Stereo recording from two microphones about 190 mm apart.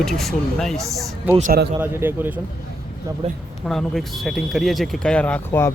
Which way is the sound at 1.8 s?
10° right (ahead or behind).